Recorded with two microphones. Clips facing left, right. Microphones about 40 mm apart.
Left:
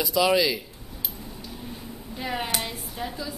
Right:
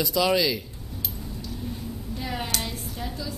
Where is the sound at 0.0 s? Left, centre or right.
Centre.